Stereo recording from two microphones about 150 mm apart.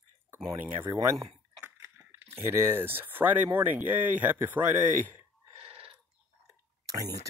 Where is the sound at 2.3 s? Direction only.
15° right (ahead or behind).